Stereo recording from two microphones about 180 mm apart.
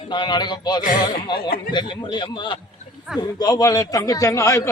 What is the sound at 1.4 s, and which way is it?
Speech, 60° left (ahead or behind).